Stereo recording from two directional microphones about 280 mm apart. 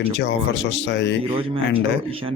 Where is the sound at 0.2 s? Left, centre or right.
Left.